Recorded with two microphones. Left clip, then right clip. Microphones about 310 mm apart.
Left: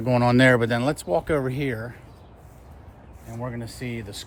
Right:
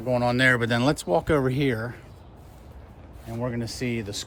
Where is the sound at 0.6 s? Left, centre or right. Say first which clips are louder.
Even; centre.